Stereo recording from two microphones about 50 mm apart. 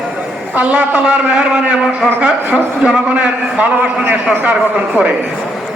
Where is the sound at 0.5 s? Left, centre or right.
Right.